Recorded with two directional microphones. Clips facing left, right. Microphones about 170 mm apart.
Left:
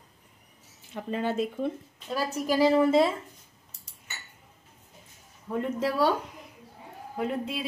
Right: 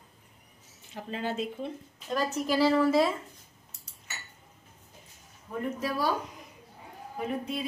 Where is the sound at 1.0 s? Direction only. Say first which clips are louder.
Left 4 dB; 50° left (ahead or behind).